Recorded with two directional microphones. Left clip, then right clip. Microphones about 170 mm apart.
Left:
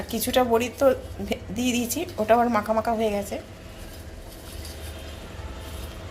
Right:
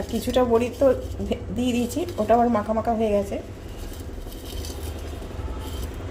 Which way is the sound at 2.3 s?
5° left (ahead or behind).